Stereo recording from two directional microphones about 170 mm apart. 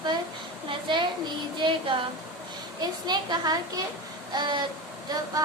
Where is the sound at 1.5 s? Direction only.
30° right (ahead or behind).